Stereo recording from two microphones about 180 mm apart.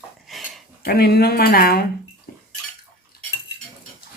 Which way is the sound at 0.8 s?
60° left (ahead or behind).